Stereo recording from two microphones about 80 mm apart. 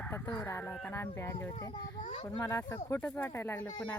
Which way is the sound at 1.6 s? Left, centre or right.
Left.